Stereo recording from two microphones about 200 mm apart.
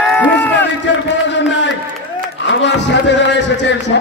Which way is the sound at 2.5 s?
65° left (ahead or behind).